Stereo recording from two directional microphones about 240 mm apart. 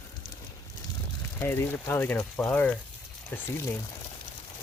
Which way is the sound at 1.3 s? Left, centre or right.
Centre.